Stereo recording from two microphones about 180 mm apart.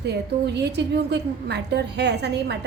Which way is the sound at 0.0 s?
70° right (ahead or behind).